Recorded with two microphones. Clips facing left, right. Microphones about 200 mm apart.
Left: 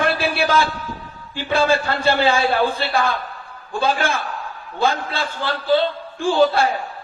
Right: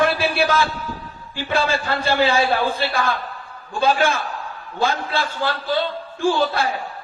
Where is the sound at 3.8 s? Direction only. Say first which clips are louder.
Right 2 dB; 55° left (ahead or behind).